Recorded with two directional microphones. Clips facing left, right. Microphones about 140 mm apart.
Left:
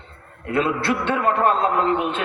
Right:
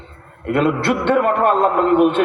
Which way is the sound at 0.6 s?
55° right (ahead or behind).